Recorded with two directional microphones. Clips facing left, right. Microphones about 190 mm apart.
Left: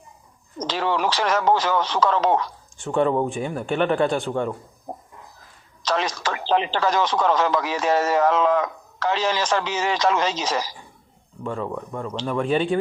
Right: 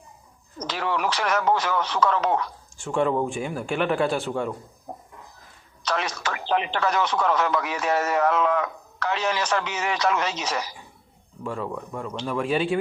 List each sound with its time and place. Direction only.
0.7 s speech: 30° left (ahead or behind)
2.7 s speech: centre (ahead or behind)
4.9 s a sound: 35° left (ahead or behind)
6.2 s speech: 30° left (ahead or behind)
11.4 s speech: centre (ahead or behind)